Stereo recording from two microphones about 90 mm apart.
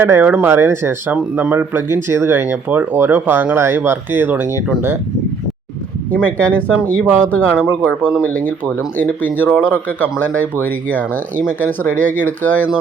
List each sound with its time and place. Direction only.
0.0 s speech: 20° right (ahead or behind)
1.1 s speech: 15° right (ahead or behind)
1.5 s speech: 25° right (ahead or behind)
6.2 s speech: 20° left (ahead or behind)
7.5 s speech: 10° right (ahead or behind)
8.2 s speech: 20° left (ahead or behind)